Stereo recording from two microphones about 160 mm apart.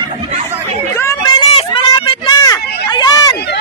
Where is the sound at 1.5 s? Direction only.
35° left (ahead or behind).